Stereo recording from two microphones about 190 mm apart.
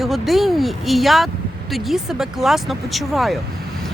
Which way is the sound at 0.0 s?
Centre (ahead or behind).